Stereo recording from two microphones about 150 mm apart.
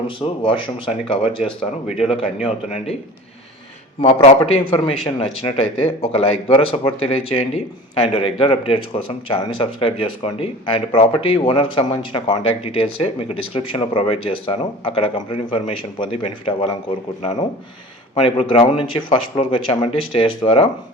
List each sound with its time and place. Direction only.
0.2 s speech: 40° left (ahead or behind)
4.0 s speech: 45° left (ahead or behind)
5.8 s speech: 45° left (ahead or behind)
18.1 s speech: 40° left (ahead or behind)